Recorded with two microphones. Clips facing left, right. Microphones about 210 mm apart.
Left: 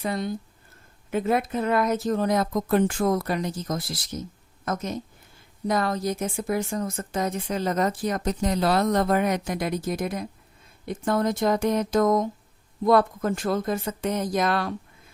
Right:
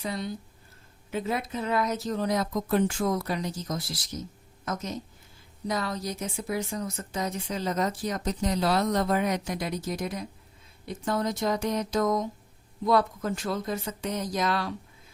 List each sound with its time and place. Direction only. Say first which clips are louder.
0.0 s a woman's voice: left 5 dB; 50° left (ahead or behind)